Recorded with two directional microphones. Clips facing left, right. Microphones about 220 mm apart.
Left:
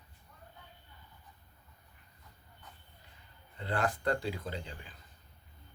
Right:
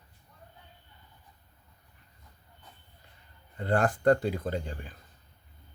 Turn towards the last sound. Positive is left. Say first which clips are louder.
# right 7 dB
turn(degrees=-45)  # may be behind; listen again after turning